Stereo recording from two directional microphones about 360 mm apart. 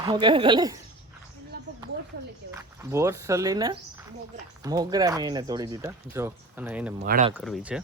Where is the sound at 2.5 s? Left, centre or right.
Centre.